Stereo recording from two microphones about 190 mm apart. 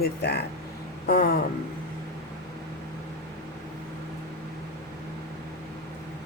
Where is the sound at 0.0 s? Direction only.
60° left (ahead or behind).